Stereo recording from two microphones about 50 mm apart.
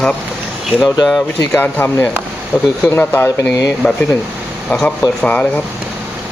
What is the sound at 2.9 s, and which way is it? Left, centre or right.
Speech, left.